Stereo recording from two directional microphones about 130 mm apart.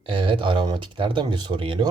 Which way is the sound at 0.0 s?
40° right (ahead or behind).